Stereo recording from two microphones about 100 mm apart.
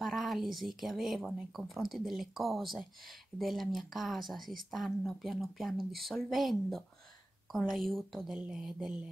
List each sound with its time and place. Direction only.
0.0 s speech: centre (ahead or behind)